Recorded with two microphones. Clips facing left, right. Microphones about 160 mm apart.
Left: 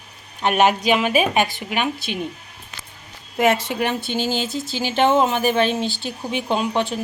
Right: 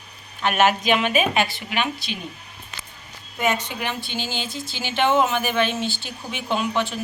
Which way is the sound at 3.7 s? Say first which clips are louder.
Left 6 dB; 50° left (ahead or behind).